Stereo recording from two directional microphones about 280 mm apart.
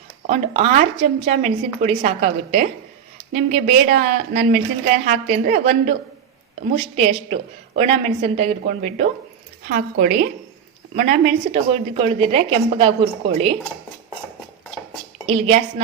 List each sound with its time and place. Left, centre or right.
0.3 s a woman's voice: right
15.3 s a woman's voice: right